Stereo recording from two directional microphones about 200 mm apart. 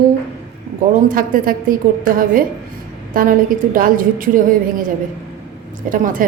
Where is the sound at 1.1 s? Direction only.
45° right (ahead or behind).